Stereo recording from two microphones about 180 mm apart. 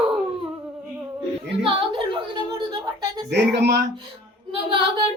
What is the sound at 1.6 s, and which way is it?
Yodeling, 25° right (ahead or behind).